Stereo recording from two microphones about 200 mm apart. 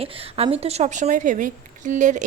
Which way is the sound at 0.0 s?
30° right (ahead or behind).